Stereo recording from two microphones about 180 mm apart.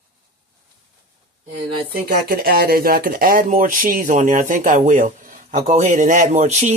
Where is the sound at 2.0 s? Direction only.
55° right (ahead or behind).